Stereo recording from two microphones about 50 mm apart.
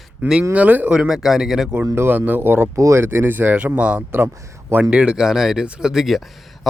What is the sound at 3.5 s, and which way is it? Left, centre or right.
Speech, right.